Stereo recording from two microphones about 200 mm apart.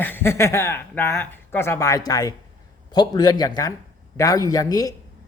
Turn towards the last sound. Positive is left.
turn(degrees=20)  # may be behind; listen again after turning